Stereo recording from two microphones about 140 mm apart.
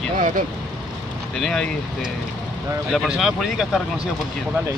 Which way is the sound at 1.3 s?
5° left (ahead or behind).